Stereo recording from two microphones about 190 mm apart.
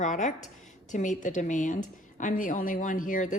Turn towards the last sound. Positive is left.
turn(degrees=45)  # may be behind; listen again after turning